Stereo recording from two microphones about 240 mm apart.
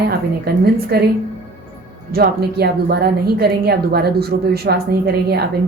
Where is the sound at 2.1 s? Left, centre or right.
Right.